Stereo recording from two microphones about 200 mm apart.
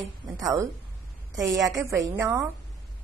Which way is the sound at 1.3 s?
15° right (ahead or behind).